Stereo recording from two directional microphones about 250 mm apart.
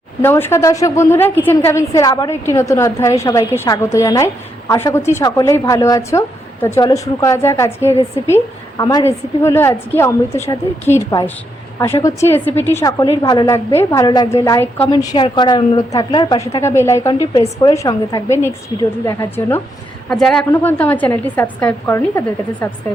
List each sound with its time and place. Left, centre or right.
0.2 s a woman's voice: centre